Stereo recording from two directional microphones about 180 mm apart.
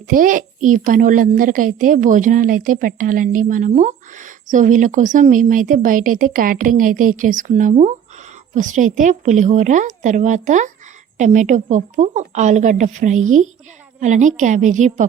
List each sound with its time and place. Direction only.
0.1 s a woman's voice: 50° right (ahead or behind)